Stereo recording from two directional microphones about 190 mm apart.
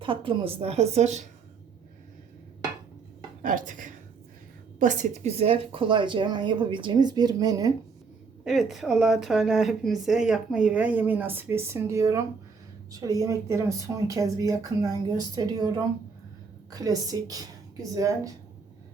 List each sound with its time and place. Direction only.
0.0 s a woman's voice: 25° right (ahead or behind)
3.4 s a woman's voice: 45° right (ahead or behind); by 7.7 s 20° right (ahead or behind)
8.4 s a woman's voice: centre (ahead or behind); by 18.3 s 15° right (ahead or behind)